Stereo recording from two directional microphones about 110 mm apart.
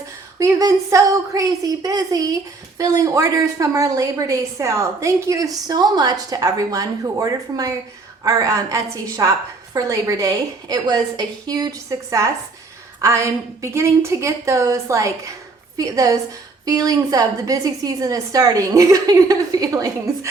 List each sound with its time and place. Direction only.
0.3 s a woman's voice: 30° right (ahead or behind)